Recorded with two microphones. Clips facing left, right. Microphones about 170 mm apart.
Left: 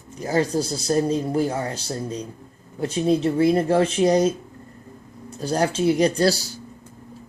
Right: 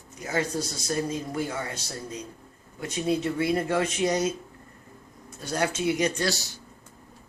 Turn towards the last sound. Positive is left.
turn(degrees=35)  # may be behind; listen again after turning